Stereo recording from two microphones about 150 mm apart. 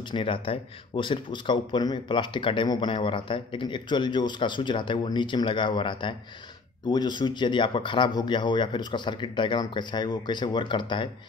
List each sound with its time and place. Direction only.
0.1 s speech: 35° left (ahead or behind)